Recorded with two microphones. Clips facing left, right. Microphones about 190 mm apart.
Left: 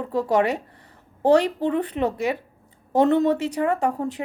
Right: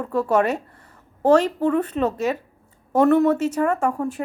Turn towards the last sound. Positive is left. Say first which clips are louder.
# right 1 dB
turn(degrees=20)  # may be behind; listen again after turning